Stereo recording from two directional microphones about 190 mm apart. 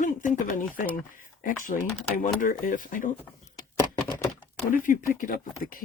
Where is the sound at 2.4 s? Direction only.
45° left (ahead or behind).